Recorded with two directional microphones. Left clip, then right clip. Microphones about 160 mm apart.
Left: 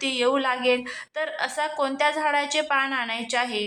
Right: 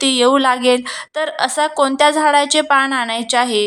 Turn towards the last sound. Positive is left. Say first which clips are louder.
# right 10 dB
turn(degrees=-45)  # may be behind; listen again after turning